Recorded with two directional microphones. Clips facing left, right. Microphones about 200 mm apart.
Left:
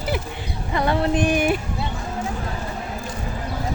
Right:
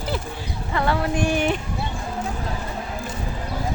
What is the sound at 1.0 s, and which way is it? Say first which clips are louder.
Music: left 2 dB; 20° left (ahead or behind).